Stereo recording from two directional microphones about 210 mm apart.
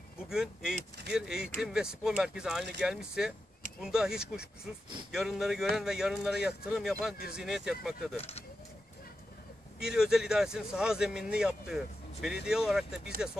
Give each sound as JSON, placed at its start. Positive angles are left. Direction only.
{"t": 0.3, "sound": "a man's voice", "side_deg": -5}
{"t": 8.2, "sound": "speech", "side_deg": 30}
{"t": 9.8, "sound": "a man's voice", "side_deg": -5}